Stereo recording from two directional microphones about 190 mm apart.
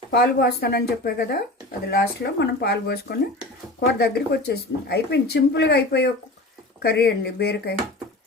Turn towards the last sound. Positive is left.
turn(degrees=55)  # may be behind; listen again after turning